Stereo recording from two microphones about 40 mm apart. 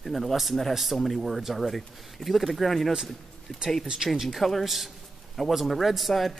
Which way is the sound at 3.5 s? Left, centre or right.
Left.